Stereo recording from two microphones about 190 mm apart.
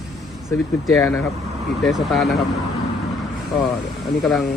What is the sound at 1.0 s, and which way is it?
Speech, 10° left (ahead or behind).